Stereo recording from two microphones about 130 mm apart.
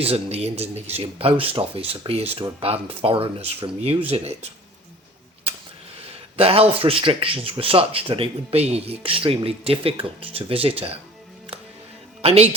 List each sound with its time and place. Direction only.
0.0 s speech: 50° right (ahead or behind)
6.3 s speech: 50° right (ahead or behind)
12.2 s speech: 50° right (ahead or behind)